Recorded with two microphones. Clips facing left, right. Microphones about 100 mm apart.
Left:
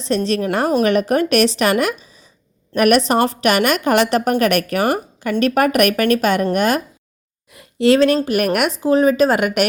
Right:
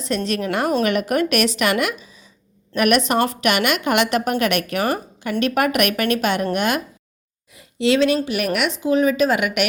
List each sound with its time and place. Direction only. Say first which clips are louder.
0.3 s a woman's voice: left 1 dB; 35° left (ahead or behind)
7.5 s speech: left 4 dB; 55° left (ahead or behind)